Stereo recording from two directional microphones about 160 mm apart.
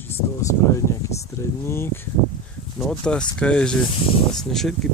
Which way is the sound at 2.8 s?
5° left (ahead or behind).